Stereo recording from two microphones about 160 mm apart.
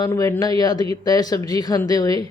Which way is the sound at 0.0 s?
20° left (ahead or behind).